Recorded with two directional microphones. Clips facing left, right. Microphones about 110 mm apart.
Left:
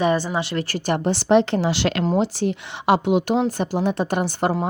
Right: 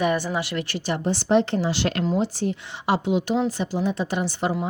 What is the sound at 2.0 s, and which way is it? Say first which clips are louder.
A woman's voice: left 4 dB; 65° left (ahead or behind).